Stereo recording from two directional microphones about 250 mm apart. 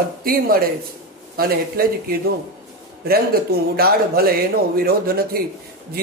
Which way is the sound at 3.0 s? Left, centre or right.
Right.